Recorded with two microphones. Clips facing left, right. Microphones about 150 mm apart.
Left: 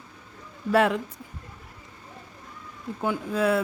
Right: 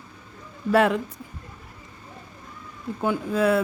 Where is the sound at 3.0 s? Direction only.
55° right (ahead or behind).